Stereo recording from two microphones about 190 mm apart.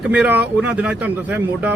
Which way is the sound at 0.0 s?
5° right (ahead or behind).